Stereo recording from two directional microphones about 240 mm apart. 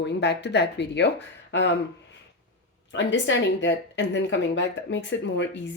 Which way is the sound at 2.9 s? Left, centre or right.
Left.